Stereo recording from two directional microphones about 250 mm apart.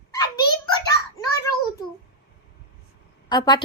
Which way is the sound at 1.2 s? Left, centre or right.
Centre.